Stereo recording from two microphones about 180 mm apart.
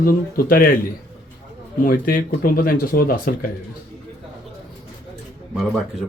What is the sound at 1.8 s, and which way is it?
Speech, 55° left (ahead or behind).